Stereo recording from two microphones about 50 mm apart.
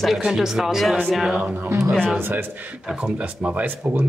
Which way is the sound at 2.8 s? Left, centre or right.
Right.